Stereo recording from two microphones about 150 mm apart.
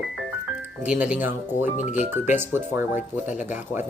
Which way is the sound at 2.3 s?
15° right (ahead or behind).